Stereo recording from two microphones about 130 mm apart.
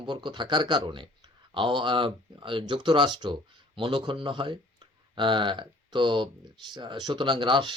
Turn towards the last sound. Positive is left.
turn(degrees=-40)  # may be behind; listen again after turning